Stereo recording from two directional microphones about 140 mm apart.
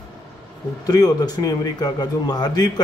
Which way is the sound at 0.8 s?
30° left (ahead or behind).